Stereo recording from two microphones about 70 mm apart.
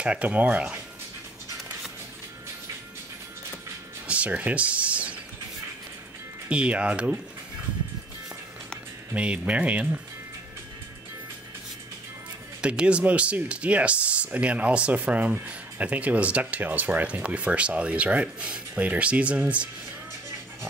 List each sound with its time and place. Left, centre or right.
0.0 s speech: centre
4.1 s a sound: centre
6.5 s speech: centre
9.1 s speech: centre
12.6 s speech: centre